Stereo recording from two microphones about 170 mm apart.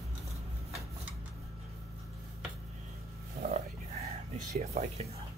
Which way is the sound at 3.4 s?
60° right (ahead or behind).